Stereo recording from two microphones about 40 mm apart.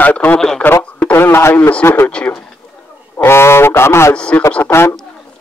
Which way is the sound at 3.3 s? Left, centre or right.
Left.